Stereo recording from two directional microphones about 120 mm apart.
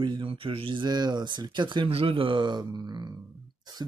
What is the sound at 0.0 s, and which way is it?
Speech, 45° right (ahead or behind).